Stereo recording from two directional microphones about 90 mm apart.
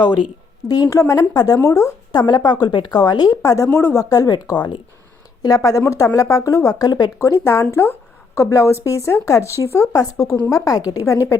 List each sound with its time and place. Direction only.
0.7 s a woman's voice: 40° left (ahead or behind)
2.1 s a woman's voice: 55° left (ahead or behind); by 4.0 s 30° left (ahead or behind)
4.1 s a woman's voice: 45° left (ahead or behind)
5.4 s a woman's voice: 45° left (ahead or behind)
7.2 s a woman's voice: 30° left (ahead or behind)